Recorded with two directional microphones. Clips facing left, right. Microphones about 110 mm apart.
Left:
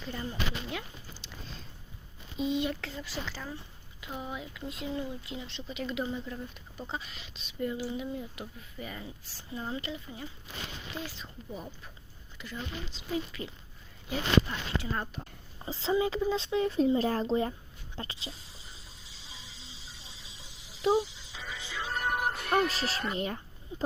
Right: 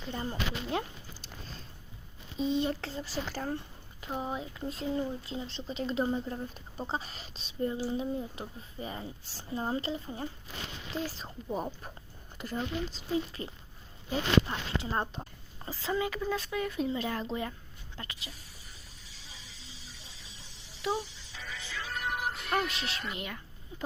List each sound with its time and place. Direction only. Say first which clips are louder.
0.3 s speech: right 3 dB; 40° right (ahead or behind)
2.4 s speech: right 1 dB; 35° right (ahead or behind)
3.2 s speech: right 5 dB; 50° right (ahead or behind)
4.0 s speech: right 3 dB; 40° right (ahead or behind)
15.7 s speech: left 4 dB; 25° left (ahead or behind)
17.9 s a sound: left 4 dB; 30° left (ahead or behind)
20.9 s music: left 7 dB; 20° left (ahead or behind)
21.9 s music: left 3 dB; 50° left (ahead or behind)